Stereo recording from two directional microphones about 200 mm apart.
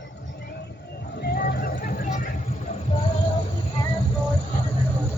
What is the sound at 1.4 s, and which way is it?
Vehicle, 40° left (ahead or behind).